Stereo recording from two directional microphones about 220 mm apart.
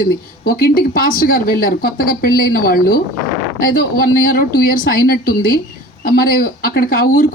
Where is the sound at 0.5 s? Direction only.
40° left (ahead or behind).